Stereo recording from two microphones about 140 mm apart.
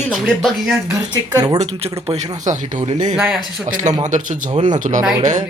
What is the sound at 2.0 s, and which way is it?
Speech, 50° right (ahead or behind).